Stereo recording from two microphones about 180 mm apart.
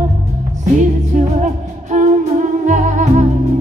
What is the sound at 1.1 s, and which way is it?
Music, 40° right (ahead or behind).